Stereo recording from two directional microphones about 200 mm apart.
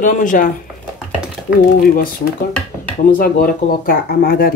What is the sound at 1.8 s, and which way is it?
Speech, 50° left (ahead or behind).